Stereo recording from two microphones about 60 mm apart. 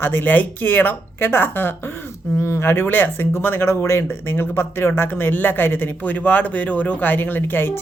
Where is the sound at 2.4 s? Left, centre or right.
Left.